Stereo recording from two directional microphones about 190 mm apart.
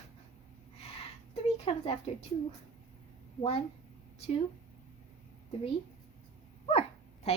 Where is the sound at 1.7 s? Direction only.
30° left (ahead or behind).